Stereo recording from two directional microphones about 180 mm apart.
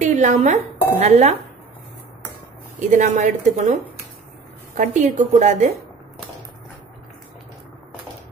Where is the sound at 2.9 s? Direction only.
45° right (ahead or behind).